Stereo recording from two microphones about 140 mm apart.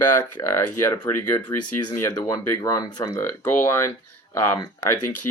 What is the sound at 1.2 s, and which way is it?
Speech, 30° left (ahead or behind).